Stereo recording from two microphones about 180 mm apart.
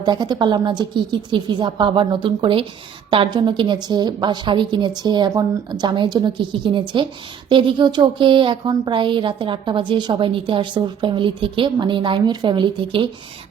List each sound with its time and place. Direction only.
0.0 s speech: 25° right (ahead or behind)